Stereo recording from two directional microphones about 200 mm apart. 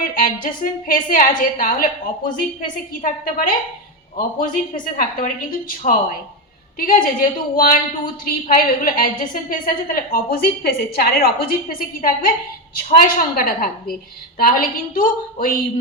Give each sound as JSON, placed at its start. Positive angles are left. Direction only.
{"t": 0.2, "sound": "a woman's voice", "side_deg": 45}